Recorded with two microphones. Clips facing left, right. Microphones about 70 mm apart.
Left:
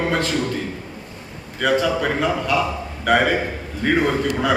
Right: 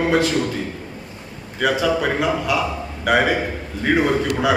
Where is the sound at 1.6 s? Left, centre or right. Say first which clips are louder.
Even; centre.